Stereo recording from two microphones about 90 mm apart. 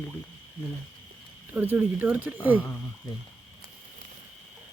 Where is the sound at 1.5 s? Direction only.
20° right (ahead or behind).